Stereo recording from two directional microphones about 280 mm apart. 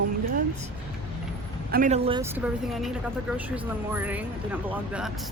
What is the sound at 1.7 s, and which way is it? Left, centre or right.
Speech, right.